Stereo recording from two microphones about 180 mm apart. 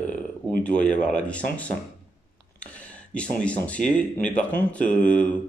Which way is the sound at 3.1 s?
5° left (ahead or behind).